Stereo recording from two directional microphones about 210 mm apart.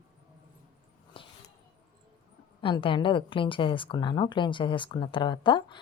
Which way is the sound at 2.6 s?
25° left (ahead or behind).